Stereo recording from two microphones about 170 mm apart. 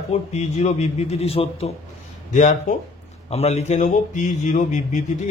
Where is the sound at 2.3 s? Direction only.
45° left (ahead or behind).